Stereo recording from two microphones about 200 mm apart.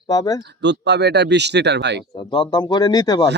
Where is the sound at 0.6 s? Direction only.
60° right (ahead or behind).